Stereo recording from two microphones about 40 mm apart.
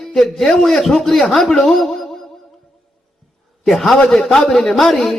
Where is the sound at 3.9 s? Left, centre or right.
Centre.